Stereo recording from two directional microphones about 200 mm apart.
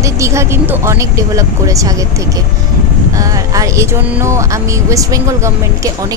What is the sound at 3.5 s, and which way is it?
Speech, 15° right (ahead or behind).